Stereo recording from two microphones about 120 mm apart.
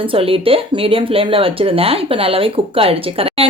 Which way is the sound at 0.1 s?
50° right (ahead or behind).